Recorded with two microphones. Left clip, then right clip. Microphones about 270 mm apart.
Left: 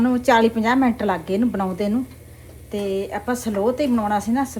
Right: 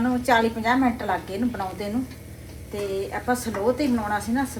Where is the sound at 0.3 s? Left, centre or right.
Left.